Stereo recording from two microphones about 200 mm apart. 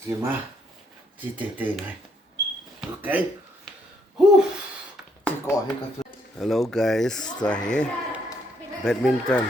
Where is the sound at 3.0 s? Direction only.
10° right (ahead or behind).